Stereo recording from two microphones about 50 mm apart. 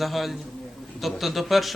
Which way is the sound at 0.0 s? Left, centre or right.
Centre.